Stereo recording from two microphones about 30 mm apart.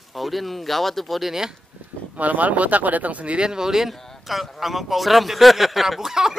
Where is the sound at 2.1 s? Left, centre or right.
Right.